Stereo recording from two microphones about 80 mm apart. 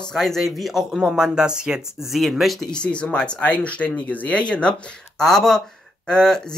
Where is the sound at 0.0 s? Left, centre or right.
Centre.